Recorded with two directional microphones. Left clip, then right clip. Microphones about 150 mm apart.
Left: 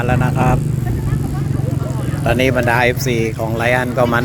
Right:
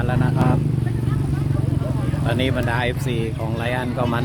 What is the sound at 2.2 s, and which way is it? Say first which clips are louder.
Speech: left 9 dB; 25° left (ahead or behind).